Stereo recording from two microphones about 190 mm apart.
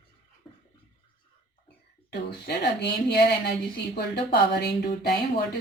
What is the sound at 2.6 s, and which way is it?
A woman's voice, 65° left (ahead or behind).